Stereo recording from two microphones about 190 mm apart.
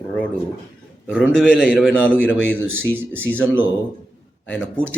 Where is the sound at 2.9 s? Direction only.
10° right (ahead or behind).